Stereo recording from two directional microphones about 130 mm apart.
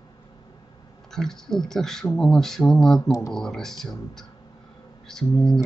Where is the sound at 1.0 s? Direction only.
5° left (ahead or behind).